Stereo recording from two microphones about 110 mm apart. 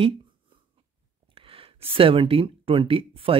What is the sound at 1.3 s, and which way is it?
Speech, 55° right (ahead or behind).